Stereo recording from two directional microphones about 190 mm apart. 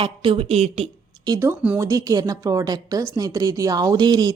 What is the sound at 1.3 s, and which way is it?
A woman's voice, 15° right (ahead or behind).